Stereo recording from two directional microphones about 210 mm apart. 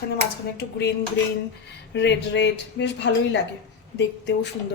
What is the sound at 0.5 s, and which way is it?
Dishes, 55° left (ahead or behind).